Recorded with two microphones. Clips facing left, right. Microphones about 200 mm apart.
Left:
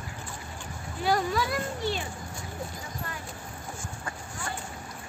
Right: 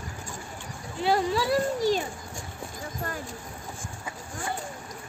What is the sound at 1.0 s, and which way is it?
A child's voice, 25° right (ahead or behind).